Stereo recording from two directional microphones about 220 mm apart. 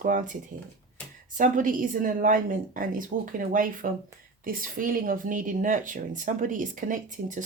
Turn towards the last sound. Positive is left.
turn(degrees=-35)  # may be behind; listen again after turning